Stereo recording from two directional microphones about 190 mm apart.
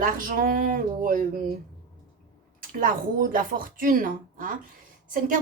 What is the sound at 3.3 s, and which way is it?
A woman's voice, 45° right (ahead or behind).